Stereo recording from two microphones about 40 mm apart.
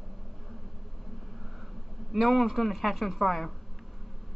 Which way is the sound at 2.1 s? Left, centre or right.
Centre.